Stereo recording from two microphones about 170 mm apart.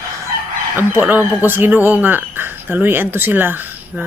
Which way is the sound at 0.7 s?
10° right (ahead or behind).